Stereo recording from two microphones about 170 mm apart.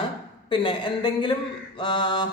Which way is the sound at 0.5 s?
30° left (ahead or behind).